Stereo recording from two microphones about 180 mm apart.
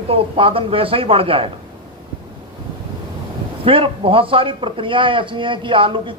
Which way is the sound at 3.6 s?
30° right (ahead or behind).